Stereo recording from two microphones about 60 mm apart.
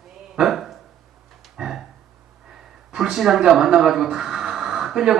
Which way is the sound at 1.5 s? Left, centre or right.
Centre.